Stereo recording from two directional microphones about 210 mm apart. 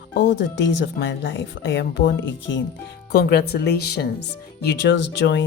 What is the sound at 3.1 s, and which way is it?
A woman's voice, 50° left (ahead or behind).